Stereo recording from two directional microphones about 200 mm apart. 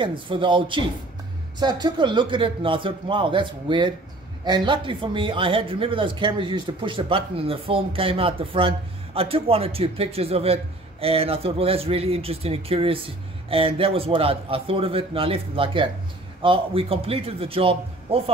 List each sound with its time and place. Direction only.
0.0 s speech: 25° right (ahead or behind)